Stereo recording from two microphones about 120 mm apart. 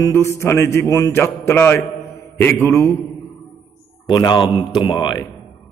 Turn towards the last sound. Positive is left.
turn(degrees=40)  # may be behind; listen again after turning